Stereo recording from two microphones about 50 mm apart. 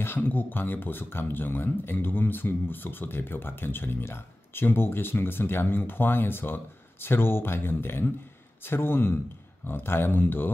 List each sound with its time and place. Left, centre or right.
0.0 s speech: left